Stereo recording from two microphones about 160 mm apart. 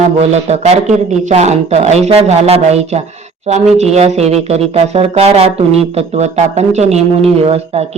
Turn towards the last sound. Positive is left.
turn(degrees=-40)  # may be behind; listen again after turning